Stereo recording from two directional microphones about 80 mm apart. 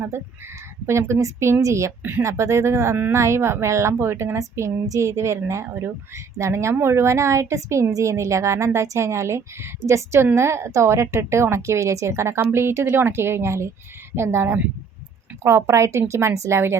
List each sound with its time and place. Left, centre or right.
0.9 s a woman's voice: right